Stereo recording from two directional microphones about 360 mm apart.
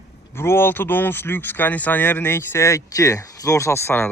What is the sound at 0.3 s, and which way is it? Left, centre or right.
Speech, centre.